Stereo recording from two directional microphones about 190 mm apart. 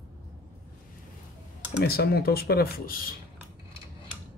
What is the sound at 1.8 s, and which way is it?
Speech, 55° left (ahead or behind).